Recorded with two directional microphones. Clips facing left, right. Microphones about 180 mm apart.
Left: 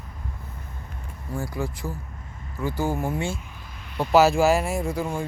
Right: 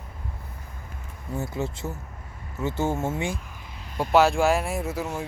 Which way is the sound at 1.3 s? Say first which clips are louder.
Even; 25° right (ahead or behind).